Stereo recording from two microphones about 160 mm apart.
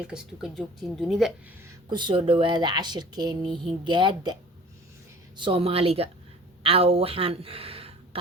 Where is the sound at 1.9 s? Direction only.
30° right (ahead or behind).